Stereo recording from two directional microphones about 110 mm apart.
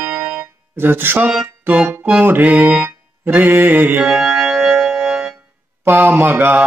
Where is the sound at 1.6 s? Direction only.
15° right (ahead or behind).